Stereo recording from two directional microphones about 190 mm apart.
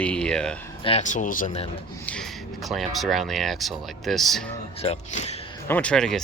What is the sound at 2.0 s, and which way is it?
Speech, 5° left (ahead or behind).